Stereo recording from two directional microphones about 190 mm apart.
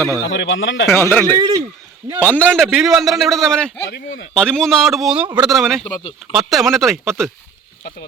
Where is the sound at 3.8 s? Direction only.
70° left (ahead or behind).